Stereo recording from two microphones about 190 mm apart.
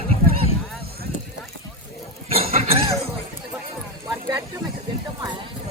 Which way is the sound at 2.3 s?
30° right (ahead or behind).